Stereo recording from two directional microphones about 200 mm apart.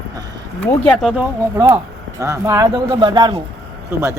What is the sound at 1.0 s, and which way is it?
A woman's voice, 5° right (ahead or behind).